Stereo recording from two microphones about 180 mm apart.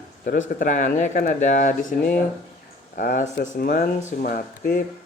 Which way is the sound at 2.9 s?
50° left (ahead or behind).